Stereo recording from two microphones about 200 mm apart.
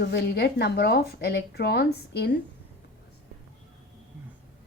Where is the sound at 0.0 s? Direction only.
55° left (ahead or behind).